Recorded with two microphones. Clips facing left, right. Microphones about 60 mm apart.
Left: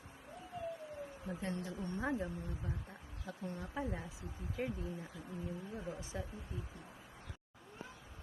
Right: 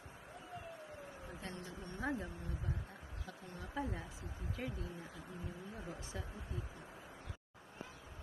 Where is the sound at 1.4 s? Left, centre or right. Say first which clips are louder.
Left 7 dB; left.